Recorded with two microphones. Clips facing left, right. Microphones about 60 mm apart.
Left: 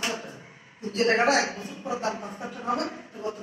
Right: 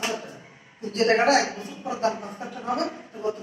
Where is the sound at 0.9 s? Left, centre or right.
Right.